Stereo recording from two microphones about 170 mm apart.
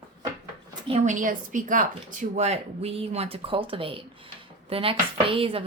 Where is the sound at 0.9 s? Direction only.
45° right (ahead or behind).